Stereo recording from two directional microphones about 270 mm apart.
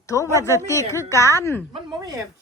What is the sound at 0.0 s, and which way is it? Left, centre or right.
A woman's voice, centre.